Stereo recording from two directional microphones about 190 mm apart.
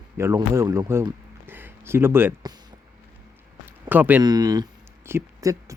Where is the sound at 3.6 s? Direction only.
10° right (ahead or behind).